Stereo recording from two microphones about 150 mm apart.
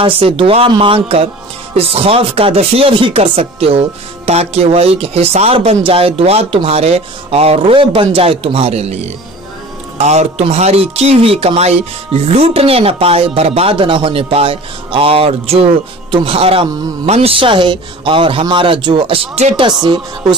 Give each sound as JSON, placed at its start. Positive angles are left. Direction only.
{"t": 0.0, "sound": "speech", "side_deg": -35}
{"t": 19.3, "sound": "speech", "side_deg": -45}
{"t": 19.6, "sound": "speech", "side_deg": -30}